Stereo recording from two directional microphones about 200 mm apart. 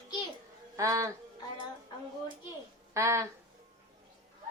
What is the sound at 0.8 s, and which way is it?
Speech, 15° right (ahead or behind).